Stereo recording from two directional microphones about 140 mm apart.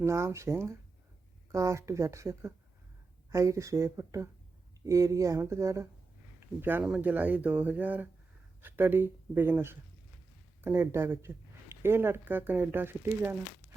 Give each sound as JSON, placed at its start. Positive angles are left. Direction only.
{"t": 0.0, "sound": "speech", "side_deg": -20}